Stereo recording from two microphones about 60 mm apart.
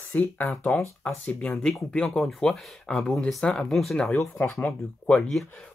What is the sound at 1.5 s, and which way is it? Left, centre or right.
Speech, centre.